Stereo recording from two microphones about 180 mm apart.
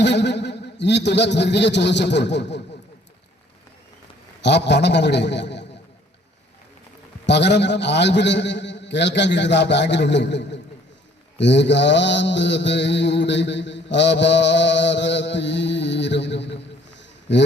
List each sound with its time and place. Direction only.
0.0 s a man's voice: 75° left (ahead or behind)
4.4 s a man's voice: 70° left (ahead or behind)
7.3 s a man's voice: 75° left (ahead or behind)
11.3 s mantra: 75° left (ahead or behind)